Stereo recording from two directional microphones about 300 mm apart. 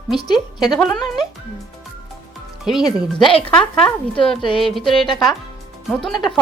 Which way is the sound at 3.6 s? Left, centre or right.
Centre.